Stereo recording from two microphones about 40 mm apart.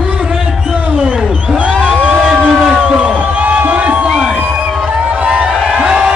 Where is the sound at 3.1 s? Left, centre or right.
Right.